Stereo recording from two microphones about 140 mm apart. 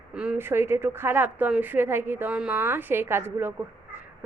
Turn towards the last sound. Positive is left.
turn(degrees=-15)  # may be behind; listen again after turning